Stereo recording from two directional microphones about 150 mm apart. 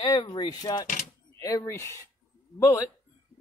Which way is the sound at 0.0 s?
30° left (ahead or behind).